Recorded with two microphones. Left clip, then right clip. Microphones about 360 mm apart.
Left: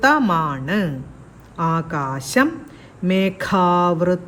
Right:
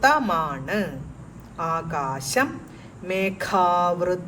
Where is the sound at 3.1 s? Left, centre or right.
Left.